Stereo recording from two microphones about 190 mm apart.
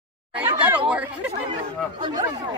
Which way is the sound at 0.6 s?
5° right (ahead or behind).